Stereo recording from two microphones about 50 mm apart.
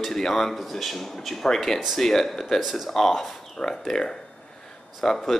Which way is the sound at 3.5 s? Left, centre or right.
Centre.